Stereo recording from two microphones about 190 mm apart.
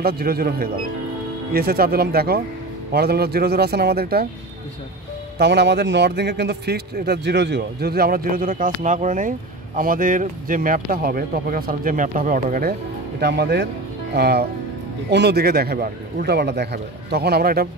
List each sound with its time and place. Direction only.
0.0 s a man's voice: 55° right (ahead or behind)
5.4 s a man's voice: 65° right (ahead or behind); by 12.7 s 45° right (ahead or behind)
13.2 s a man's voice: 60° right (ahead or behind)